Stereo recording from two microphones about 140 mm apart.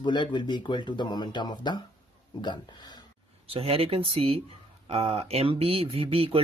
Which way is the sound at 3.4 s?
45° right (ahead or behind).